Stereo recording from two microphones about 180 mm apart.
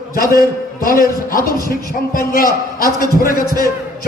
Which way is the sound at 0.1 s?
50° left (ahead or behind).